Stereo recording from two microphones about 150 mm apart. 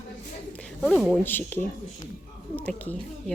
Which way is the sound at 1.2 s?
15° left (ahead or behind).